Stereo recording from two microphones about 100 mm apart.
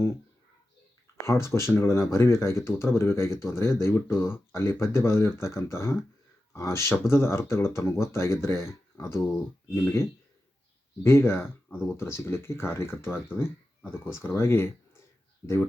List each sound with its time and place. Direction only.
1.3 s speech: 30° left (ahead or behind)